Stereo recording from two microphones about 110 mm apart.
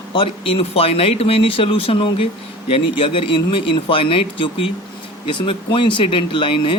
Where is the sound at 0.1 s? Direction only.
55° left (ahead or behind).